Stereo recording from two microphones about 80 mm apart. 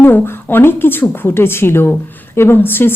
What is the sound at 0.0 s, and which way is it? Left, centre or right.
Speech, left.